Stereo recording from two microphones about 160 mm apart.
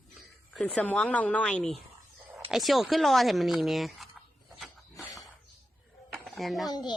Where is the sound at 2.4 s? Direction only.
Centre (ahead or behind).